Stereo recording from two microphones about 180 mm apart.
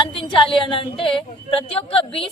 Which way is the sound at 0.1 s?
30° left (ahead or behind).